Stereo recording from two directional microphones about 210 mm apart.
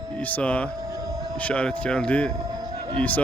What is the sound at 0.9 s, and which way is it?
Siren, 15° right (ahead or behind).